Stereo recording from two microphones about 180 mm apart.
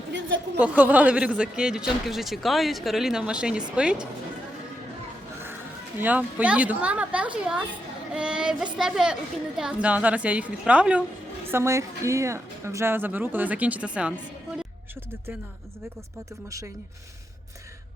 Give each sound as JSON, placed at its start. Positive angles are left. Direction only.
{"t": 0.6, "sound": "speech", "side_deg": -10}
{"t": 6.0, "sound": "speech", "side_deg": -10}
{"t": 16.5, "sound": "speech", "side_deg": -15}